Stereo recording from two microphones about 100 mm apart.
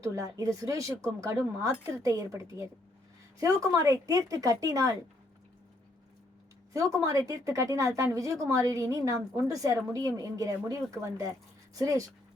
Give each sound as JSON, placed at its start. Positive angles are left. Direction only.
{"t": 0.0, "sound": "a woman's voice", "side_deg": -35}
{"t": 6.7, "sound": "a woman's voice", "side_deg": -35}